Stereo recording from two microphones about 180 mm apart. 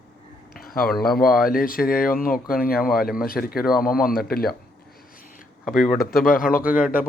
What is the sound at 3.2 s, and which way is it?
Speech, 55° left (ahead or behind).